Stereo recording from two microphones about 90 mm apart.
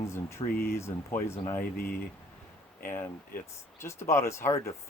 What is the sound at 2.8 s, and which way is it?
Speech, 25° left (ahead or behind).